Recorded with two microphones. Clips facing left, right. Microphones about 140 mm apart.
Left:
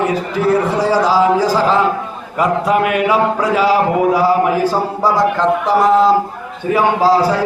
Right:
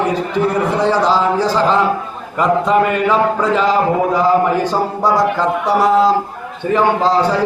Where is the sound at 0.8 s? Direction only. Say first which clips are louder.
Even; 5° left (ahead or behind).